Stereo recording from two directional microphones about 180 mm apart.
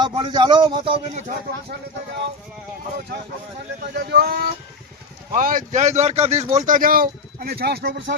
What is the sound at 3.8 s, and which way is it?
Speech, 60° right (ahead or behind).